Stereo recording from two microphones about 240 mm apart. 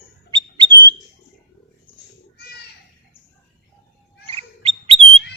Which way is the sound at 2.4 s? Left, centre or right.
Left.